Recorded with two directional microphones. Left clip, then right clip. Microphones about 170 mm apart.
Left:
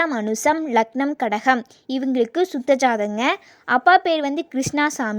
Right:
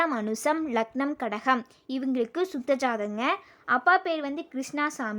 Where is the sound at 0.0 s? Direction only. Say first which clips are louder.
Left 6 dB; 30° left (ahead or behind).